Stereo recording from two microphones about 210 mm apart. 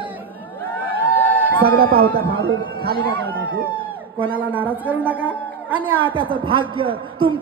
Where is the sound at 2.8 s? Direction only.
45° right (ahead or behind).